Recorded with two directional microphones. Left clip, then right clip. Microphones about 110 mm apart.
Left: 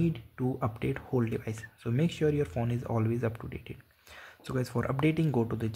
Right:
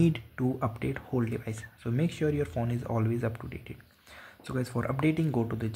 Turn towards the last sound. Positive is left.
turn(degrees=10)  # may be behind; listen again after turning